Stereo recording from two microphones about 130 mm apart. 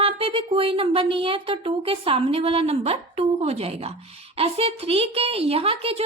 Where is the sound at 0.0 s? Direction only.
50° right (ahead or behind).